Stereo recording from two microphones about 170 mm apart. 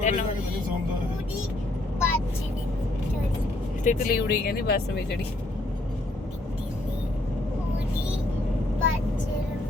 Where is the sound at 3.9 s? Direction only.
60° left (ahead or behind).